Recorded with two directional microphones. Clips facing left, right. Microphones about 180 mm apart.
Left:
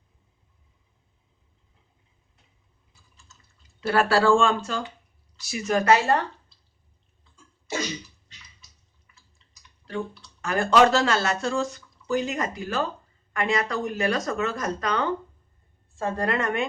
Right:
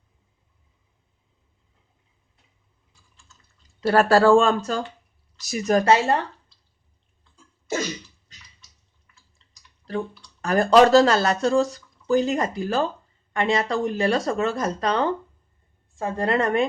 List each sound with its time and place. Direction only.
2.9 s typing: 5° left (ahead or behind)
3.8 s speech: 40° right (ahead or behind)
10.4 s speech: 35° right (ahead or behind)
16.0 s speech: 20° right (ahead or behind)